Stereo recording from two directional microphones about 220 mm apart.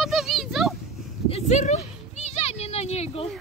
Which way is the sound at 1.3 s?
30° left (ahead or behind).